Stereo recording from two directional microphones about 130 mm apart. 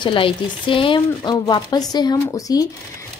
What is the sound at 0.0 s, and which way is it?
Speech, 40° left (ahead or behind).